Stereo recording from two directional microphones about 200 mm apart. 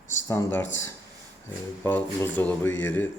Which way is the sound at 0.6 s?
70° left (ahead or behind).